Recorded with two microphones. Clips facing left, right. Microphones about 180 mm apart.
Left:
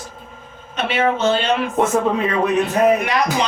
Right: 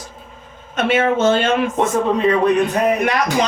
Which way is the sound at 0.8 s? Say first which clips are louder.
Right 3 dB; 45° right (ahead or behind).